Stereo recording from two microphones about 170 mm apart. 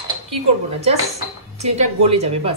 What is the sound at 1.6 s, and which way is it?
Speech, 40° right (ahead or behind).